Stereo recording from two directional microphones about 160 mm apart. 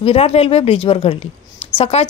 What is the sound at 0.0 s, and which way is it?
A woman's voice, 40° left (ahead or behind).